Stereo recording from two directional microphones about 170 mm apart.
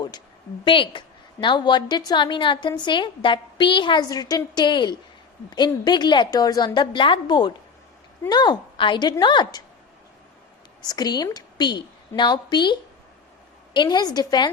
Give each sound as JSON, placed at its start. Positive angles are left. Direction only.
{"t": 0.6, "sound": "a woman's voice", "side_deg": 30}
{"t": 10.8, "sound": "a woman's voice", "side_deg": 25}
{"t": 13.7, "sound": "a woman's voice", "side_deg": 25}